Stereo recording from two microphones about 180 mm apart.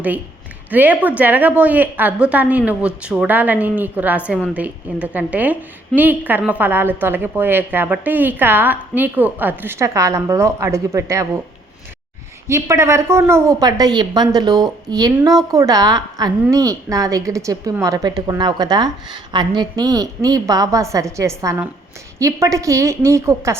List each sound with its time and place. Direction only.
0.7 s a woman's voice: 10° right (ahead or behind)
12.5 s a woman's voice: 15° right (ahead or behind)